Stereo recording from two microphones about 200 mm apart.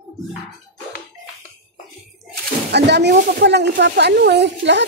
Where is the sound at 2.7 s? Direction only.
55° right (ahead or behind).